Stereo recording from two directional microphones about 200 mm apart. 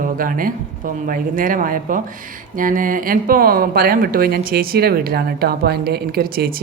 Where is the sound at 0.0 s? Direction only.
45° right (ahead or behind).